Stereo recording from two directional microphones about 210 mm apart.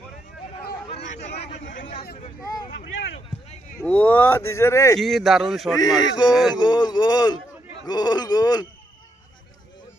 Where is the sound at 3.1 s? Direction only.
30° left (ahead or behind).